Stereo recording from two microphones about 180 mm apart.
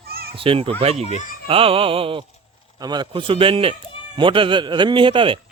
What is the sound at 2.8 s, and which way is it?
Speech, 25° right (ahead or behind).